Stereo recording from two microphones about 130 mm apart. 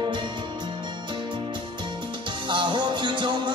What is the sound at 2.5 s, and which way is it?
Music, 35° right (ahead or behind).